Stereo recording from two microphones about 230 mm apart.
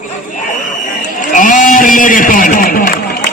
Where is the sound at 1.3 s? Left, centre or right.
Left.